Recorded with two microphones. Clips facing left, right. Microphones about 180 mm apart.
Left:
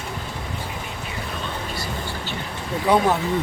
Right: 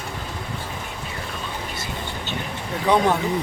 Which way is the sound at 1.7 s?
20° right (ahead or behind).